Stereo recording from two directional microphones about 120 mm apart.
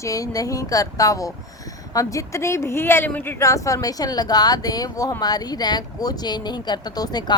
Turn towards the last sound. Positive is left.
turn(degrees=35)  # may be behind; listen again after turning